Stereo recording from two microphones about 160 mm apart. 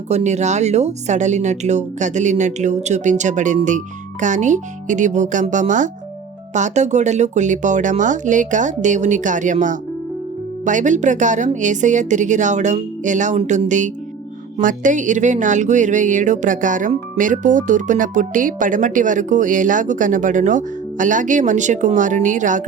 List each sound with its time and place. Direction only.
0.1 s speech: 45° right (ahead or behind)